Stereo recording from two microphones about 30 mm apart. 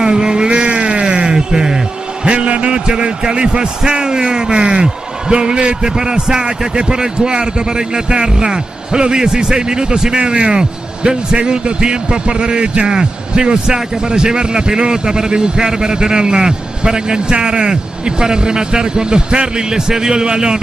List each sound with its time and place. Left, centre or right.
0.0 s vehicle: right
0.5 s a sound: right
2.2 s a man's voice: right